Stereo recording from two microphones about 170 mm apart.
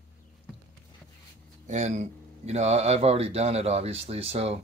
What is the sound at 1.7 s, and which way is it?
Speech, 40° right (ahead or behind).